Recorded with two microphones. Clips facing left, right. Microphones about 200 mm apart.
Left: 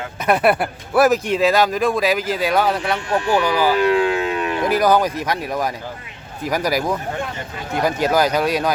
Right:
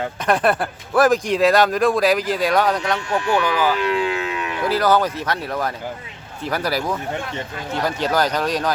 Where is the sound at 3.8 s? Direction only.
45° left (ahead or behind).